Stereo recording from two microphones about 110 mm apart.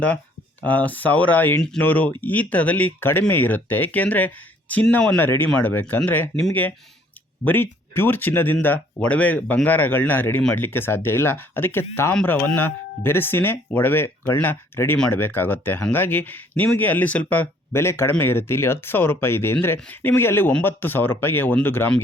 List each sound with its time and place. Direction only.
0.6 s speech: 15° left (ahead or behind)